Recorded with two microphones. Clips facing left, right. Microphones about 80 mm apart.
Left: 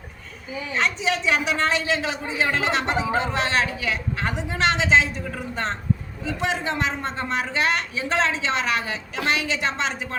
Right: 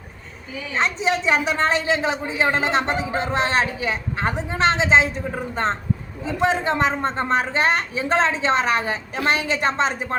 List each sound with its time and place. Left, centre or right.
0.7 s a man's voice: right